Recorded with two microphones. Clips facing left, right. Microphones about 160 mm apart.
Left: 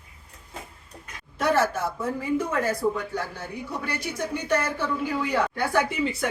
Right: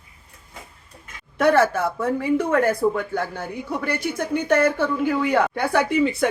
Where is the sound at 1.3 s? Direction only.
60° right (ahead or behind).